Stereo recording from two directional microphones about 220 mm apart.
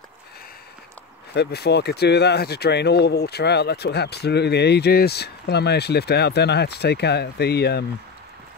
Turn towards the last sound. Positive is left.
turn(degrees=50)  # may be behind; listen again after turning